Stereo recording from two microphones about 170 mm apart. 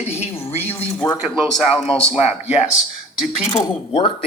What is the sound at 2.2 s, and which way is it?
Speech, 40° left (ahead or behind).